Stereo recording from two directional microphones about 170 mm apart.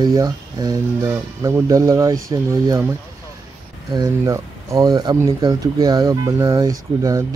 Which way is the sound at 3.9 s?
20° right (ahead or behind).